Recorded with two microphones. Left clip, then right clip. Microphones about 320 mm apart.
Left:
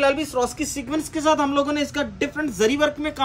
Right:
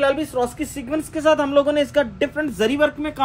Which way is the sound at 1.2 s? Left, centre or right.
Left.